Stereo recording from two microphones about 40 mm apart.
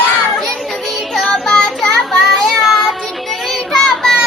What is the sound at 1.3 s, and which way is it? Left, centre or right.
Child singing, centre.